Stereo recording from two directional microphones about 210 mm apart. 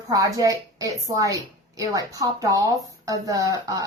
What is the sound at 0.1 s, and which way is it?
A woman's voice, 15° right (ahead or behind).